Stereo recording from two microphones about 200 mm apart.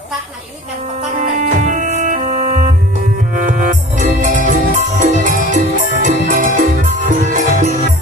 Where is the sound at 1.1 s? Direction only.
40° right (ahead or behind).